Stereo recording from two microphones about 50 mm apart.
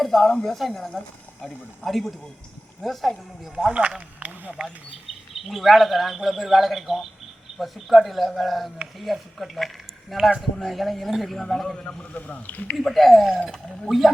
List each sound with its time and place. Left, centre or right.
0.0 s a man's voice: centre
3.5 s speech: centre
5.5 s a man's voice: centre
11.8 s speech: left
12.7 s a man's voice: centre